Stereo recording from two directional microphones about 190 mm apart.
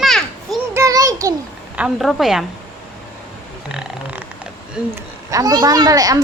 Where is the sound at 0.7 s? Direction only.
15° right (ahead or behind).